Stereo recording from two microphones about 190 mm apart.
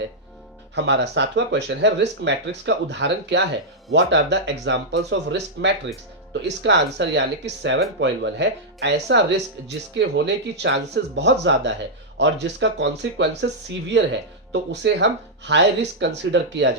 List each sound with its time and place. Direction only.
0.8 s speech: 65° right (ahead or behind)